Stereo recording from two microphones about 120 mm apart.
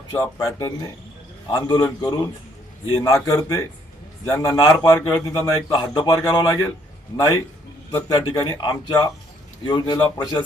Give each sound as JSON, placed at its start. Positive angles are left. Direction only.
{"t": 0.2, "sound": "speech", "side_deg": 25}
{"t": 1.5, "sound": "a man's voice", "side_deg": 40}
{"t": 2.9, "sound": "a man's voice", "side_deg": 25}